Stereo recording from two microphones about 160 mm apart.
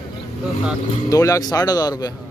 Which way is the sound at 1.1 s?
20° left (ahead or behind).